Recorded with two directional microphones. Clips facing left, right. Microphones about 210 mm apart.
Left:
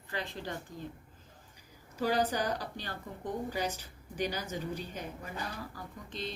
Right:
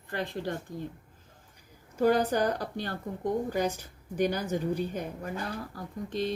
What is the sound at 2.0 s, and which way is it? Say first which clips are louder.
Speech: right 6 dB; 55° right (ahead or behind).